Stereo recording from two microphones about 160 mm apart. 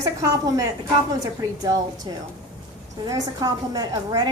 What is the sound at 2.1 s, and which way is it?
A woman's voice, 25° right (ahead or behind).